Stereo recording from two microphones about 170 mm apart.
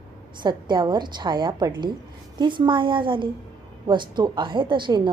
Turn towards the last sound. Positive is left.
turn(degrees=-30)  # may be behind; listen again after turning